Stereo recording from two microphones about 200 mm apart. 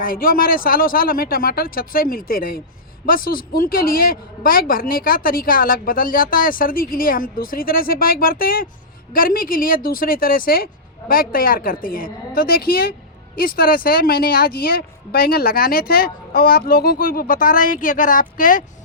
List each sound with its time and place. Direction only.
0.0 s a woman's voice: 45° left (ahead or behind)